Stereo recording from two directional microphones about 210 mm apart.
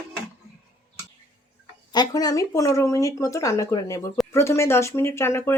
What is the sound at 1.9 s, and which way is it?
Speech, 20° left (ahead or behind).